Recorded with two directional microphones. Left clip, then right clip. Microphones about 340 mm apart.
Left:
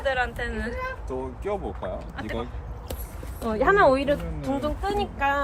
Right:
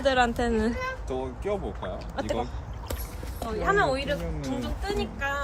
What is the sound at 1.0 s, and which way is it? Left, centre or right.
Speech, centre.